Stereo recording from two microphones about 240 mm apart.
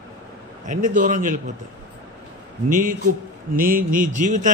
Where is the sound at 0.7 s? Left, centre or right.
Right.